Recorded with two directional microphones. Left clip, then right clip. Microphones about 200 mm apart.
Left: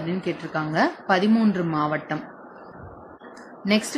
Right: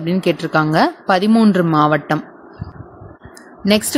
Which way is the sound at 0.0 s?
55° right (ahead or behind).